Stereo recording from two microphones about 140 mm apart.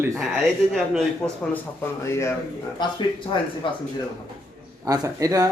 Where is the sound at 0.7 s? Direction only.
Centre (ahead or behind).